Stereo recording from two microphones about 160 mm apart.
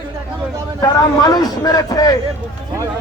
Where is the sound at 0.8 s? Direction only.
25° left (ahead or behind).